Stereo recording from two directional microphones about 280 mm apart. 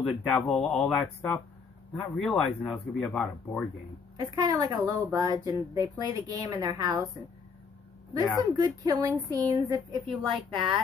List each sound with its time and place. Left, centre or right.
0.0 s speech: centre
4.2 s speech: centre
8.5 s speech: centre